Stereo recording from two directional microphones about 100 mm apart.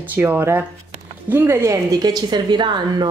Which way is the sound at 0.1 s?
20° right (ahead or behind).